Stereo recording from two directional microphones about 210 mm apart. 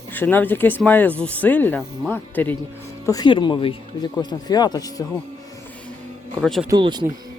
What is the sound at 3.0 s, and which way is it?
A man's voice, 20° left (ahead or behind).